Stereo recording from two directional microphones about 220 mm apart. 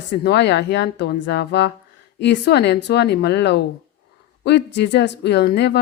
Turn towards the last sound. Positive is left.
turn(degrees=50)  # may be behind; listen again after turning